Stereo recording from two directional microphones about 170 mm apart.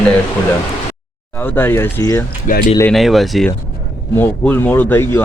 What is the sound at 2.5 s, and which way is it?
Speech, 50° left (ahead or behind).